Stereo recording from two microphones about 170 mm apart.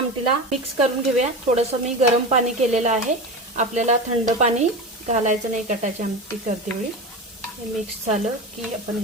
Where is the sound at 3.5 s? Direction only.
45° right (ahead or behind).